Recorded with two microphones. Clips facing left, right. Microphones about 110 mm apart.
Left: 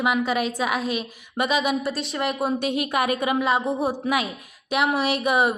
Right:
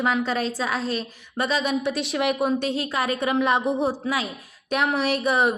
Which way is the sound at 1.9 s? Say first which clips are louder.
Right 3 dB; centre (ahead or behind).